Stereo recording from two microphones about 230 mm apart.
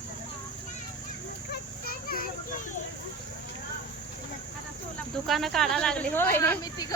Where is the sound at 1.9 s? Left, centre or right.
Left.